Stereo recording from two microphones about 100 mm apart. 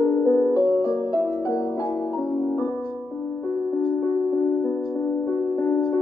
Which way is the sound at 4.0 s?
30° left (ahead or behind).